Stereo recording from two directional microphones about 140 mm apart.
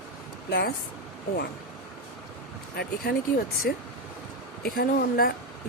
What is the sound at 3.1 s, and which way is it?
Speech, 90° left.